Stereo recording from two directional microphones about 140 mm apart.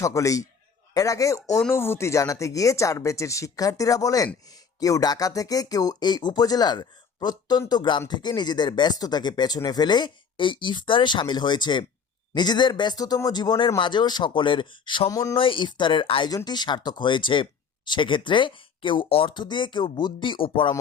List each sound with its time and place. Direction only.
0.0 s speech: 20° left (ahead or behind)
15.1 s speech: 20° left (ahead or behind)
15.4 s speech: 35° left (ahead or behind)